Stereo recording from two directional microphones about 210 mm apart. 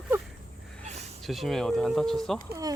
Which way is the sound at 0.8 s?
30° right (ahead or behind).